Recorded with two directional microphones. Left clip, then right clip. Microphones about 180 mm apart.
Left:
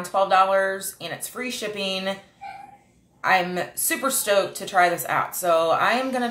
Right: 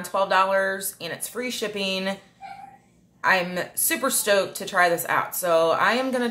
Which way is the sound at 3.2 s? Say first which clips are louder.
Left 1 dB; 30° right (ahead or behind).